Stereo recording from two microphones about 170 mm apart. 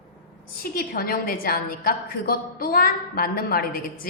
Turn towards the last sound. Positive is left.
turn(degrees=60)  # may be behind; listen again after turning